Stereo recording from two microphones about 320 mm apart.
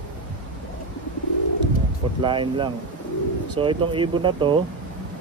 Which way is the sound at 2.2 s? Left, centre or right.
Centre.